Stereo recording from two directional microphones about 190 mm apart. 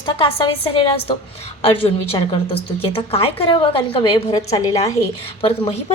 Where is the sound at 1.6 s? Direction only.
30° left (ahead or behind).